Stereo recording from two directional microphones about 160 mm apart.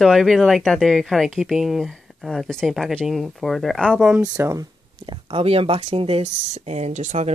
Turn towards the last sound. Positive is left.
turn(degrees=-50)  # may be behind; listen again after turning